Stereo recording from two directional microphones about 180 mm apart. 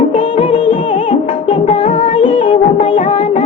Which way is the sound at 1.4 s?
30° left (ahead or behind).